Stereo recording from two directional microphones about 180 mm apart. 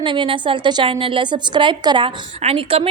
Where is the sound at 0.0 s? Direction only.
25° right (ahead or behind).